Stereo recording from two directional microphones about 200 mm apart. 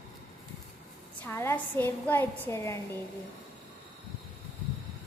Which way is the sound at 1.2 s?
10° left (ahead or behind).